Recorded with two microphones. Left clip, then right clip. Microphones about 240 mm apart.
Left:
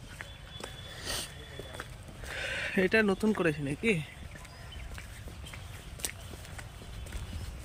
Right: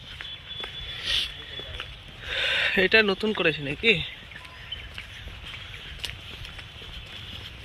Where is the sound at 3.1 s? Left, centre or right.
Centre.